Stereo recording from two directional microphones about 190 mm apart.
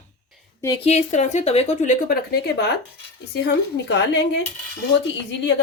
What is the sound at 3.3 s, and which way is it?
Speech, 65° left (ahead or behind).